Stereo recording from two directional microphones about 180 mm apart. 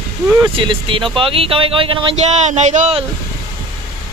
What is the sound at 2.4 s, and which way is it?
Speech, 40° right (ahead or behind).